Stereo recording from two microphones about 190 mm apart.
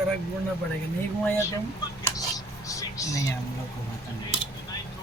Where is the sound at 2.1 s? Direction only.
20° left (ahead or behind).